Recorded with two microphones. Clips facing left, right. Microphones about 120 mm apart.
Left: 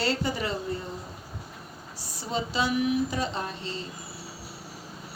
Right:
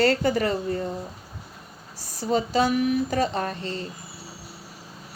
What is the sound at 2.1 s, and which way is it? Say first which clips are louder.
Speech: right 7 dB; 45° right (ahead or behind).